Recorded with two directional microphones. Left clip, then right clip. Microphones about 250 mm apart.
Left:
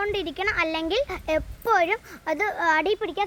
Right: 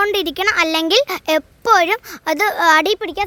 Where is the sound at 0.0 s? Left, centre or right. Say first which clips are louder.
Right 9 dB; right.